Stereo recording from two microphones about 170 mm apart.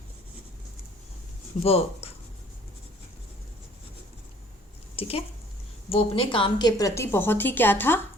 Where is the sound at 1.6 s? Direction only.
35° left (ahead or behind).